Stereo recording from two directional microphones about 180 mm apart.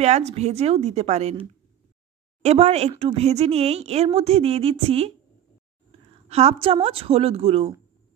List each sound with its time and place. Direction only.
0.0 s a woman's voice: 35° right (ahead or behind)